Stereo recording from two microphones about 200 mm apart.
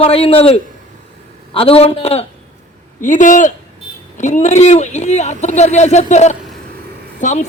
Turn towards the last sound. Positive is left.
turn(degrees=35)  # may be behind; listen again after turning